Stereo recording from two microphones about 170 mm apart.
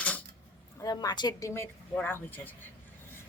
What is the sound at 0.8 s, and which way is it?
A woman's voice, 20° left (ahead or behind).